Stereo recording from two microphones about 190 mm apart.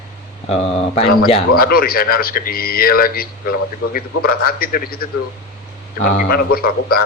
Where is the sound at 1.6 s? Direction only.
50° left (ahead or behind).